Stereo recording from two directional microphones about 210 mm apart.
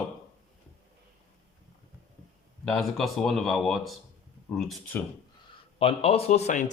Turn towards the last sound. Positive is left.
turn(degrees=35)  # may be behind; listen again after turning